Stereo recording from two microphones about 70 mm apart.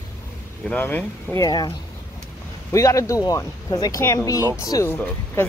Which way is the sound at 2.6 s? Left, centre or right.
Left.